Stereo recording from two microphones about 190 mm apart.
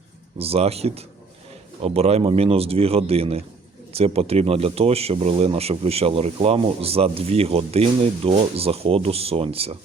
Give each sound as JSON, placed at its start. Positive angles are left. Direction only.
{"t": 0.3, "sound": "speech", "side_deg": -30}